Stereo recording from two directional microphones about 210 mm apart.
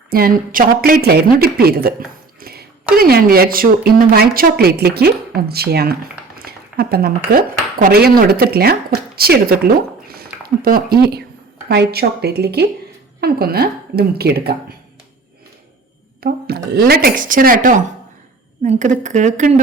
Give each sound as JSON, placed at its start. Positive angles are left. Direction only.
{"t": 0.1, "sound": "a woman's voice", "side_deg": -45}
{"t": 2.4, "sound": "a sound", "side_deg": -45}
{"t": 2.9, "sound": "a woman's voice", "side_deg": -45}
{"t": 16.2, "sound": "speech", "side_deg": -50}